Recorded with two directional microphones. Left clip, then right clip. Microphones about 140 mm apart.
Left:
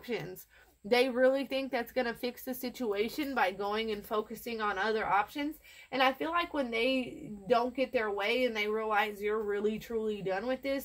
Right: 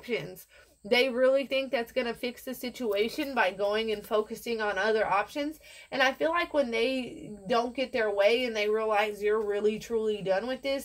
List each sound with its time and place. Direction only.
0.8 s a woman's voice: 45° left (ahead or behind)